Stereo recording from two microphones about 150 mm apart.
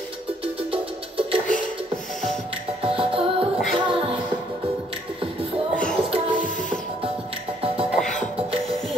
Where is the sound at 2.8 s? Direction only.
35° right (ahead or behind).